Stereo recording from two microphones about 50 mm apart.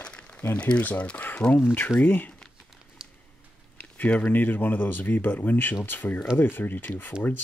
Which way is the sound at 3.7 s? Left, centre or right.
Left.